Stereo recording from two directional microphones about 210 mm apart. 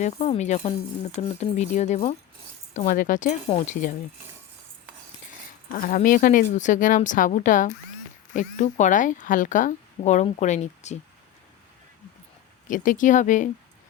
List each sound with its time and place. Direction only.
0.0 s speech: 35° left (ahead or behind)
5.7 s speech: 40° left (ahead or behind)
12.6 s speech: 40° left (ahead or behind)